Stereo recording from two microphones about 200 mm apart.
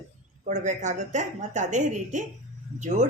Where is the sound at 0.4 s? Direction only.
35° right (ahead or behind).